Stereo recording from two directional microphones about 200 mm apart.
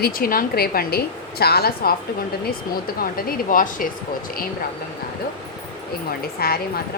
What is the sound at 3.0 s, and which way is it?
Speech, 45° left (ahead or behind).